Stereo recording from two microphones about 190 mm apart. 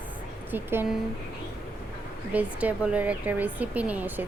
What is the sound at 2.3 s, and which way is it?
A woman's voice, 10° right (ahead or behind).